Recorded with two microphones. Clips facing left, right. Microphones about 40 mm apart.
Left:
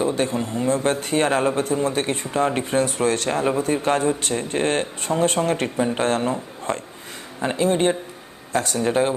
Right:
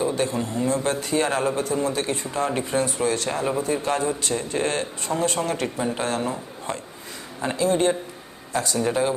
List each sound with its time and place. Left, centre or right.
0.4 s speech: left
3.2 s speech: left
5.6 s speech: centre
5.9 s speech: left
7.4 s speech: left